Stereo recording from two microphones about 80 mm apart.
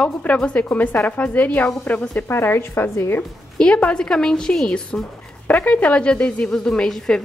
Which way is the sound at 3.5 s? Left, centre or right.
Centre.